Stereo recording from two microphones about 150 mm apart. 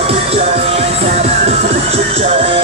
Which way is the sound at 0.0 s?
40° right (ahead or behind).